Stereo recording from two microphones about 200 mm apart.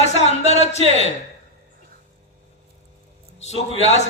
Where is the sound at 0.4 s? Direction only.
35° left (ahead or behind).